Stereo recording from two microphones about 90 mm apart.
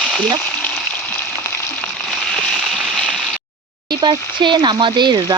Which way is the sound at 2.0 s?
Centre (ahead or behind).